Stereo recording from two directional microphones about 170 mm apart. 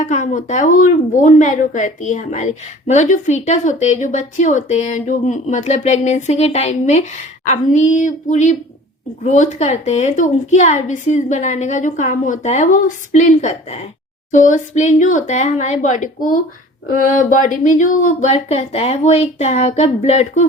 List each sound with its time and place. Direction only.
0.0 s speech: 45° left (ahead or behind)